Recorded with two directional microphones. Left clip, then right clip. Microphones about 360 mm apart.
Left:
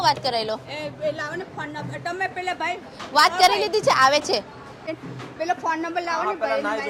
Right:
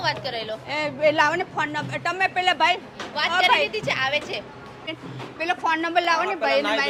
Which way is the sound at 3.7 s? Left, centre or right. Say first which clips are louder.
Left 6 dB; left.